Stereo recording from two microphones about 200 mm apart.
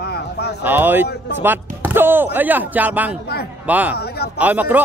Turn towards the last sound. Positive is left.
turn(degrees=-10)  # may be behind; listen again after turning